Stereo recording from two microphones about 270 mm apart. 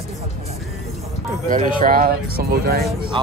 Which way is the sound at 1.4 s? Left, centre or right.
Right.